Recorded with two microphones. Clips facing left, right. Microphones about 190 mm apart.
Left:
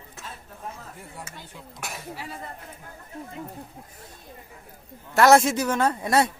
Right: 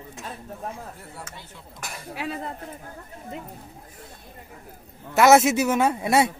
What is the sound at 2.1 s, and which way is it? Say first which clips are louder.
Speech: right 6 dB; 70° right (ahead or behind).